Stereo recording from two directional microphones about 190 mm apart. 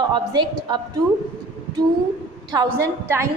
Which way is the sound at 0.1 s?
25° right (ahead or behind).